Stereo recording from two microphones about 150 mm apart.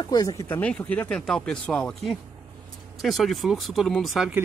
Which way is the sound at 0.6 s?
10° left (ahead or behind).